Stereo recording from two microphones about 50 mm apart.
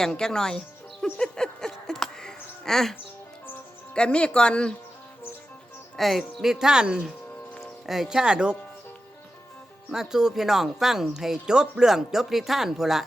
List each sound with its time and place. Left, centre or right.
0.0 s speech: centre
1.2 s a sound: centre
3.9 s speech: centre
6.0 s speech: centre
9.9 s speech: centre